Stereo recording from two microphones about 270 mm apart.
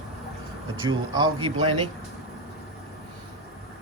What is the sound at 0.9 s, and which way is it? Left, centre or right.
Speech, centre.